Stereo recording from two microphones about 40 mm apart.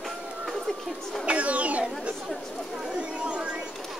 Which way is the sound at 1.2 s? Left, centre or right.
Right.